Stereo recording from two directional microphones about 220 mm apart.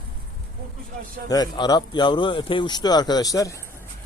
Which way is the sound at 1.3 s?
20° left (ahead or behind).